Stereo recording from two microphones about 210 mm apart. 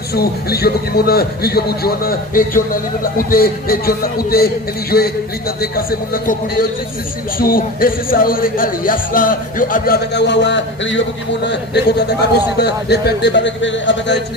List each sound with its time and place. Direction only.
0.1 s a man's voice: 50° left (ahead or behind)